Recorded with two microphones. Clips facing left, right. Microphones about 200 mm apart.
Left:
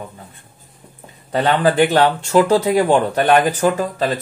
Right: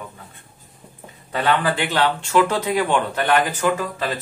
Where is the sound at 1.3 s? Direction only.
40° left (ahead or behind).